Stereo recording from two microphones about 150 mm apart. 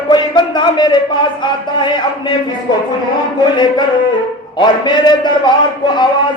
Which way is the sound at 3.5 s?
30° left (ahead or behind).